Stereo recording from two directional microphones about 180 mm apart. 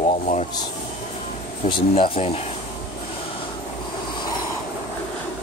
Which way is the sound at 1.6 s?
30° left (ahead or behind).